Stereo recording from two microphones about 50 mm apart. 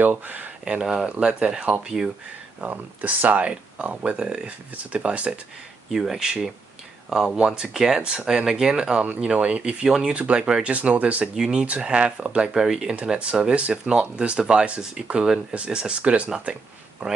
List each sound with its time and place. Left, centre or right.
0.0 s speech: right
0.7 s speech: centre
2.6 s speech: right
5.9 s speech: centre; by 9.8 s right
9.8 s speech: centre
10.1 s speech: right
11.3 s speech: centre